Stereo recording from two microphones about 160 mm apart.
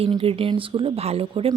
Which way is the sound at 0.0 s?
35° right (ahead or behind).